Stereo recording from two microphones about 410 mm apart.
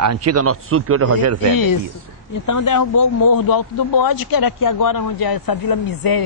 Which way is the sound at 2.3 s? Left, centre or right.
Left.